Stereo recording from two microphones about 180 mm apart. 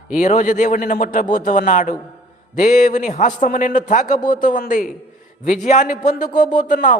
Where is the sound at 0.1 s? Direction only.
45° left (ahead or behind).